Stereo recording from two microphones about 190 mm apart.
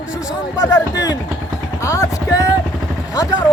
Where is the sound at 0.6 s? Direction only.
15° left (ahead or behind).